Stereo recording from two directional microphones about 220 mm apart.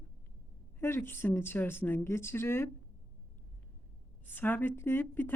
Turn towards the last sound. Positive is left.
turn(degrees=10)  # may be behind; listen again after turning